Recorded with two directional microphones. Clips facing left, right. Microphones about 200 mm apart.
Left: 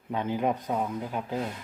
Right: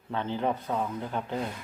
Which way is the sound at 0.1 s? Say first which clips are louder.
Left 2 dB; 15° left (ahead or behind).